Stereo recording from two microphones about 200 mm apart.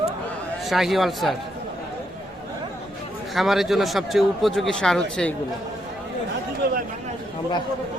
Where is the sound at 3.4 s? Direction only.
Centre (ahead or behind).